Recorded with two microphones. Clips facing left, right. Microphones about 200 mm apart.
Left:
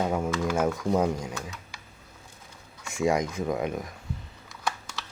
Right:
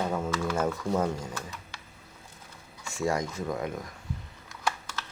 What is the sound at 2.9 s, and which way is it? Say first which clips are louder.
Speech: left 4 dB; 15° left (ahead or behind).